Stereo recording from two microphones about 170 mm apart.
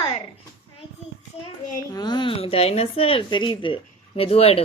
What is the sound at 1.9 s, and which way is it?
Speech, 25° left (ahead or behind).